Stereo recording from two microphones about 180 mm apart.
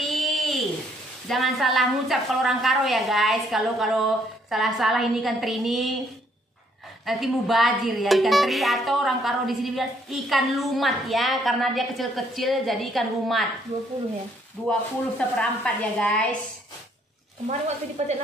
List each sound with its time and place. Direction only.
0.0 s a sound: centre (ahead or behind)
1.2 s speech: centre (ahead or behind)
7.1 s speech: centre (ahead or behind)
14.7 s speech: 5° left (ahead or behind)
17.5 s speech: 40° right (ahead or behind)